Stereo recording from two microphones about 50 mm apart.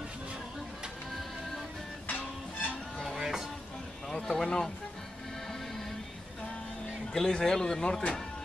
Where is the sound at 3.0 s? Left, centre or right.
Centre.